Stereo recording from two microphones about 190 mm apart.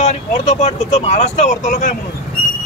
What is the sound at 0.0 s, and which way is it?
Speech, 40° left (ahead or behind).